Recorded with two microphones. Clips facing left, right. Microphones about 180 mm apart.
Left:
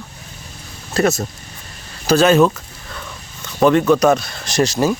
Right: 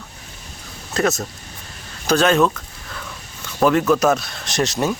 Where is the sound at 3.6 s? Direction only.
5° right (ahead or behind).